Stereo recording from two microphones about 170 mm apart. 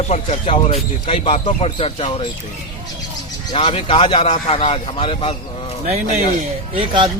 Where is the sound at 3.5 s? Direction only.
35° left (ahead or behind).